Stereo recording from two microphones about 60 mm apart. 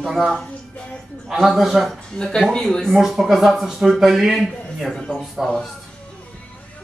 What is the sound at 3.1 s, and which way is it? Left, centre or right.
Speech, centre.